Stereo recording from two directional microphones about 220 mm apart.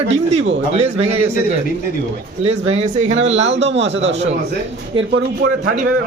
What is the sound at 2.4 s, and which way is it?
Speech, 25° right (ahead or behind).